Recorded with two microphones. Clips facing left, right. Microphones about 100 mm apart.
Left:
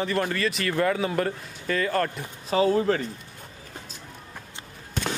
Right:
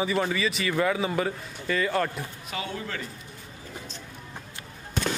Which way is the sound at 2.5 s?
35° left (ahead or behind).